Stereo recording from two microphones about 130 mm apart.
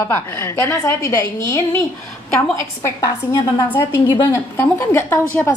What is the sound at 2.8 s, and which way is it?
Speech, 25° left (ahead or behind).